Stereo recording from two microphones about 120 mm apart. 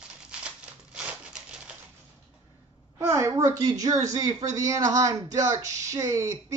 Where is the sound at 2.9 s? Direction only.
25° right (ahead or behind).